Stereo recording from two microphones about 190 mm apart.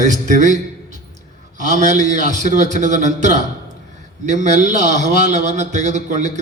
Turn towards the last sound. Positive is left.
turn(degrees=-40)  # may be behind; listen again after turning